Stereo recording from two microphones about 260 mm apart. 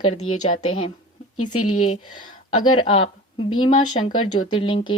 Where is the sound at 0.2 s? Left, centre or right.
Left.